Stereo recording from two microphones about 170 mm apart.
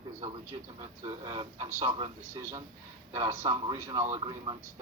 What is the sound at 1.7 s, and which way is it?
A man's voice, 35° right (ahead or behind).